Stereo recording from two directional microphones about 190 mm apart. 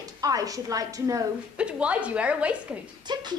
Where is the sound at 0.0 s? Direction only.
20° right (ahead or behind).